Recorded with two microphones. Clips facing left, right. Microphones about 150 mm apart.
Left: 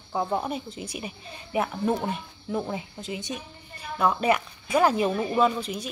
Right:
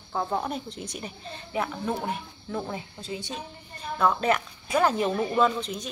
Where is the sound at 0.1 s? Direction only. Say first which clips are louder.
Left 1 dB; 10° left (ahead or behind).